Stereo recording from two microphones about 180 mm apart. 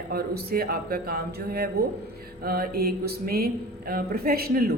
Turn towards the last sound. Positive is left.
turn(degrees=-60)  # may be behind; listen again after turning